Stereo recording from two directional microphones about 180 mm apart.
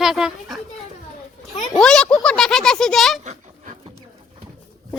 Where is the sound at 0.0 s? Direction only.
5° right (ahead or behind).